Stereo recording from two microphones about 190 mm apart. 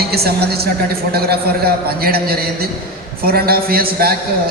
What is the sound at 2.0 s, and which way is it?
A man's voice, 55° right (ahead or behind).